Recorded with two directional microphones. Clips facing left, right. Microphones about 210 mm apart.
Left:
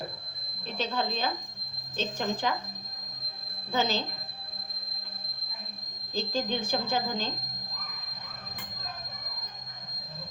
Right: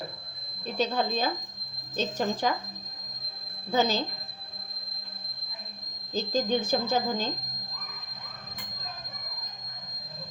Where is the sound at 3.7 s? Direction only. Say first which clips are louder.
Right 3 dB; 40° right (ahead or behind).